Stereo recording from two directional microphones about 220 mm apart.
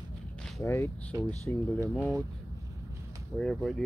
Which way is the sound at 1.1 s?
15° right (ahead or behind).